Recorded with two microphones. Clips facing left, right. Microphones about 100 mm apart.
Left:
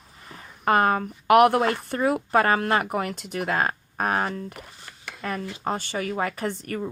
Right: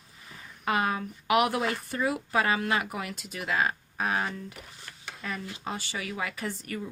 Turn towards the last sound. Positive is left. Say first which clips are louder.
# left 6 dB
turn(degrees=50)  # may be behind; listen again after turning